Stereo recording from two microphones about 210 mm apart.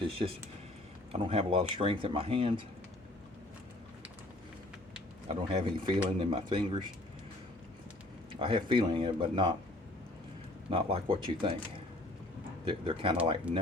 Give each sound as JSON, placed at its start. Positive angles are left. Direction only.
{"t": 0.2, "sound": "speech", "side_deg": -30}
{"t": 5.3, "sound": "speech", "side_deg": -25}
{"t": 8.3, "sound": "speech", "side_deg": -25}
{"t": 10.7, "sound": "speech", "side_deg": -25}
{"t": 12.6, "sound": "speech", "side_deg": -25}